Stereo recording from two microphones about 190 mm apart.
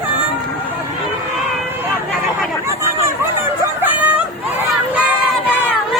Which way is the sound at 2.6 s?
15° right (ahead or behind).